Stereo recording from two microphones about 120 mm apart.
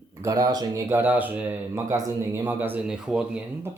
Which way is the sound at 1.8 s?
30° right (ahead or behind).